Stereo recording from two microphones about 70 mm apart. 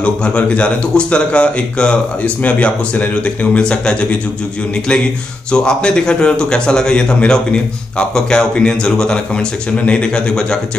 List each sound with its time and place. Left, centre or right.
0.0 s speech: centre
5.5 s speech: centre